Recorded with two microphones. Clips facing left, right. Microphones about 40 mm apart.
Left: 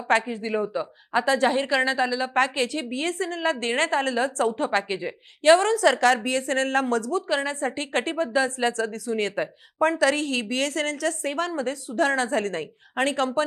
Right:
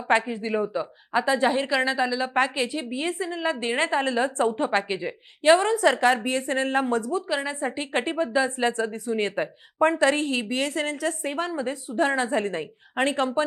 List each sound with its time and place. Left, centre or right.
0.5 s a woman's voice: centre
1.2 s a woman's voice: centre
1.5 s a woman's voice: centre; by 4.9 s right
4.9 s a woman's voice: centre
5.4 s a woman's voice: centre
9.3 s a woman's voice: centre
9.8 s a woman's voice: right